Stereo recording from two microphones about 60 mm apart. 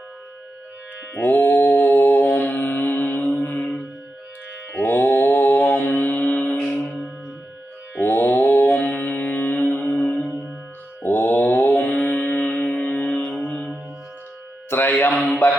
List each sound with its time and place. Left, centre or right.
1.1 s mantra: left
4.7 s mantra: left
7.9 s mantra: left
8.9 s music: left
11.0 s mantra: left
13.1 s music: centre
14.7 s music: left